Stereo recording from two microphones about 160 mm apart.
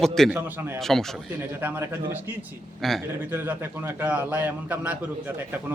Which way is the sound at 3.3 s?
15° right (ahead or behind).